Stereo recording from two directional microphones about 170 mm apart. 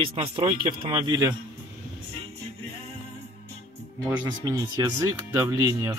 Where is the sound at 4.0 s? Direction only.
20° right (ahead or behind).